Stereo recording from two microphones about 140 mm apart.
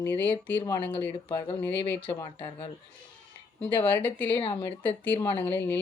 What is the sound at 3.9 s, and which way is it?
Speech, 15° left (ahead or behind).